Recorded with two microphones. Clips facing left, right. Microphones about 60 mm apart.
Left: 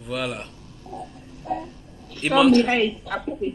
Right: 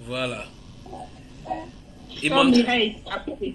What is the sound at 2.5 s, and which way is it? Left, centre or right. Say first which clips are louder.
A woman's voice: left 1 dB; left.